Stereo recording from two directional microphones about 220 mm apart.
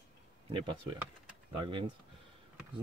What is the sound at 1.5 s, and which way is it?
Speech, 20° right (ahead or behind).